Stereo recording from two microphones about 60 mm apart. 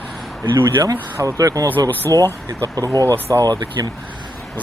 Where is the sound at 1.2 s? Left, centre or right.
Right.